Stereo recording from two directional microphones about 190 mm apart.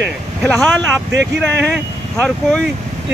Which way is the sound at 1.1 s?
65° right (ahead or behind).